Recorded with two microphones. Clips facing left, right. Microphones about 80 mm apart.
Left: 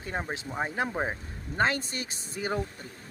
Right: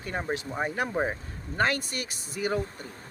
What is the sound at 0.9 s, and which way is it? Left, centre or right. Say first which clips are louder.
Speech: right 3 dB; centre.